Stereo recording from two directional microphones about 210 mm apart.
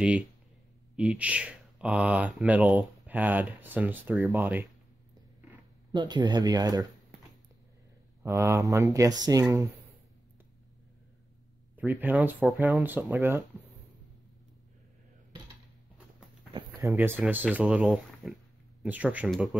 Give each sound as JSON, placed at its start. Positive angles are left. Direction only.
{"t": 0.9, "sound": "speech", "side_deg": -5}
{"t": 5.9, "sound": "speech", "side_deg": -20}
{"t": 8.2, "sound": "speech", "side_deg": -15}
{"t": 11.7, "sound": "speech", "side_deg": -10}
{"t": 16.9, "sound": "speech", "side_deg": -5}